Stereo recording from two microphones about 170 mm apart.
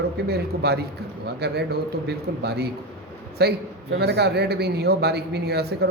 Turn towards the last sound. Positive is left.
turn(degrees=-70)  # may be behind; listen again after turning